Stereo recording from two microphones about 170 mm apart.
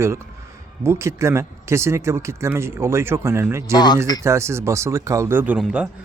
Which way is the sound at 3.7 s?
25° left (ahead or behind).